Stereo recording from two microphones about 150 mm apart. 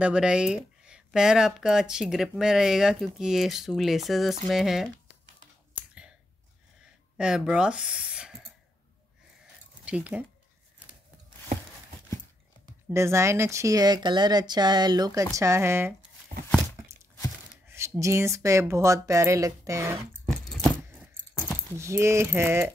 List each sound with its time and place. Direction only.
0.0 s speech: 5° right (ahead or behind)
5.8 s clicking: 5° right (ahead or behind)
7.2 s speech: 5° right (ahead or behind)
9.8 s speech: 10° right (ahead or behind)
12.9 s speech: 20° right (ahead or behind)
17.6 s speech: 20° right (ahead or behind)
20.2 s a sound: centre (ahead or behind)
21.7 s speech: 20° right (ahead or behind)